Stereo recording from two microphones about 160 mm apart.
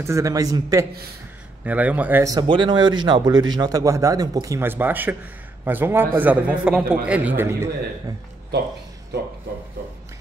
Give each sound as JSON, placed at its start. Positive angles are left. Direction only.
{"t": 0.0, "sound": "speech", "side_deg": -20}
{"t": 1.6, "sound": "a man's voice", "side_deg": -10}
{"t": 2.3, "sound": "a man's voice", "side_deg": -30}